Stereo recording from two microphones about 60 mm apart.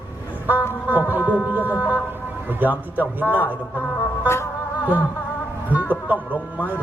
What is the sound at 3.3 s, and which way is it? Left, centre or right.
Speech, left.